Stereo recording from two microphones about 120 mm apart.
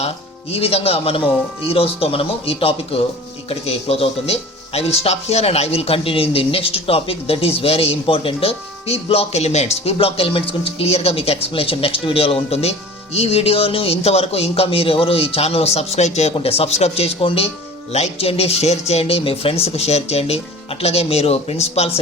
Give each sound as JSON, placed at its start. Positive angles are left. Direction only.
{"t": 0.5, "sound": "speech", "side_deg": 55}
{"t": 16.3, "sound": "speech", "side_deg": 55}